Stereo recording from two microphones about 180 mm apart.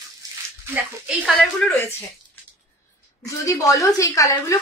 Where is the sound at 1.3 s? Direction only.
5° left (ahead or behind).